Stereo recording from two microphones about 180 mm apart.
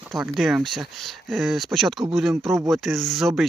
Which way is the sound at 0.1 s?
Centre (ahead or behind).